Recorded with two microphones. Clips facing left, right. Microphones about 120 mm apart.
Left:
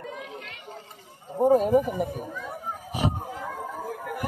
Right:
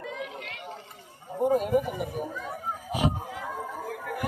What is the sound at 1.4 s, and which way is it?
Speech, 40° left (ahead or behind).